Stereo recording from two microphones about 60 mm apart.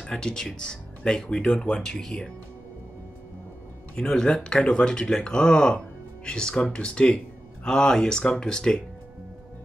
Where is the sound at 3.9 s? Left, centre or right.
Centre.